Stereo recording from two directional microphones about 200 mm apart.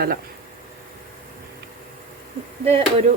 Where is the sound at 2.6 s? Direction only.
30° right (ahead or behind).